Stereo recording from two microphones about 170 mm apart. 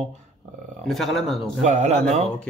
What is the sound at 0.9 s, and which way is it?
Speech, centre (ahead or behind).